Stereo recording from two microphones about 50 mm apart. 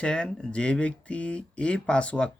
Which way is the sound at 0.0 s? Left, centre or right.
Centre.